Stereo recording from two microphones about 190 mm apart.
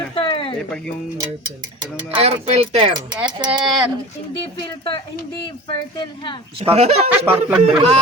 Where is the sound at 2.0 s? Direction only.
30° right (ahead or behind).